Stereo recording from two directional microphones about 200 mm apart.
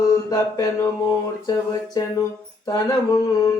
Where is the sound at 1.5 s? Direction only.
20° left (ahead or behind).